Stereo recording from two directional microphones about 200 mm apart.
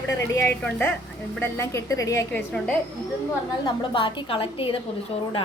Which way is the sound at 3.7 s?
25° left (ahead or behind).